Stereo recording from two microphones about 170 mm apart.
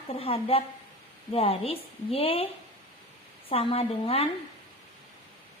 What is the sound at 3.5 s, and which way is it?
Speech, 35° left (ahead or behind).